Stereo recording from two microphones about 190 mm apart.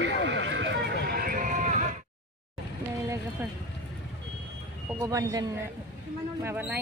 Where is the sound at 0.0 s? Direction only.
65° right (ahead or behind).